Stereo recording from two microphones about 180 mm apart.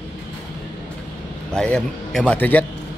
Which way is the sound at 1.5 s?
5° left (ahead or behind).